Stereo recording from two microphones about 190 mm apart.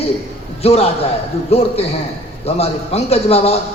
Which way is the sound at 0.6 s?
30° left (ahead or behind).